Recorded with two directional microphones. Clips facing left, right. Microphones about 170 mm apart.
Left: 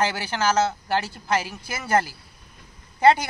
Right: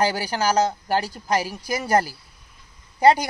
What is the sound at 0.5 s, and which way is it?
Speech, 10° right (ahead or behind).